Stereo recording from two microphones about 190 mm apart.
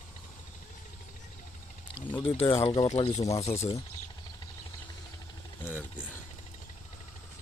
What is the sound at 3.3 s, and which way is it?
Speech, 30° left (ahead or behind).